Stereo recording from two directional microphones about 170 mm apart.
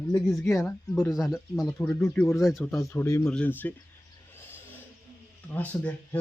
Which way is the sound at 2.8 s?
15° left (ahead or behind).